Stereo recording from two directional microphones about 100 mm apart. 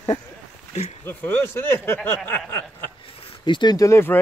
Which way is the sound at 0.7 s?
90° left.